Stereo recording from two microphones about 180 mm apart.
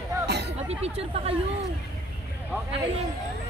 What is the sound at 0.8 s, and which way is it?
Speech, 35° right (ahead or behind).